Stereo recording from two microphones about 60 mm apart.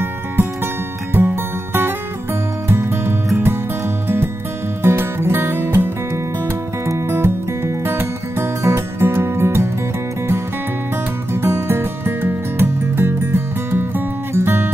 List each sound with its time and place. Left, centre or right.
1.1 s music: right
7.1 s music: right
11.3 s music: right